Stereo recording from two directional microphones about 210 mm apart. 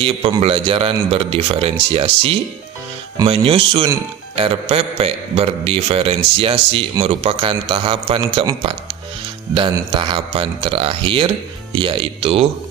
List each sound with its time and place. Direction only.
0.0 s a man's voice: 25° right (ahead or behind)